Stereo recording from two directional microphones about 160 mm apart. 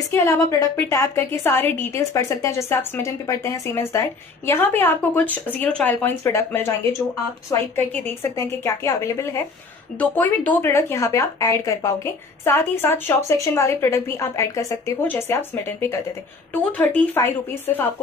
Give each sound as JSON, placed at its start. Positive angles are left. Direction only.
{"t": 0.1, "sound": "a woman's voice", "side_deg": 15}